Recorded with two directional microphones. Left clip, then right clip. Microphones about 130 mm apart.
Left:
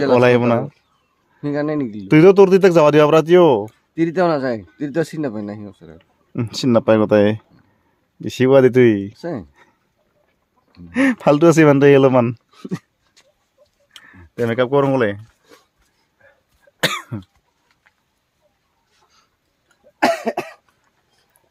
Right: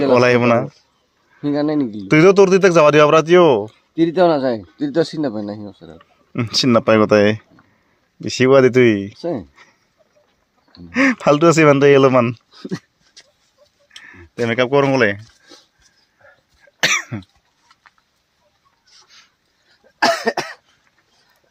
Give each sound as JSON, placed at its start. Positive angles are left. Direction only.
{"t": 0.0, "sound": "speech", "side_deg": 25}
{"t": 1.4, "sound": "speech", "side_deg": 35}
{"t": 6.3, "sound": "speech", "side_deg": 15}
{"t": 10.8, "sound": "speech", "side_deg": 30}
{"t": 14.0, "sound": "speech", "side_deg": 15}
{"t": 16.8, "sound": "cough", "side_deg": 15}
{"t": 19.0, "sound": "a sound", "side_deg": 20}
{"t": 20.0, "sound": "cough", "side_deg": -5}